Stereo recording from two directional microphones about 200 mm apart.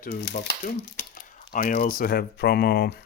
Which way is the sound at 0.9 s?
40° left (ahead or behind).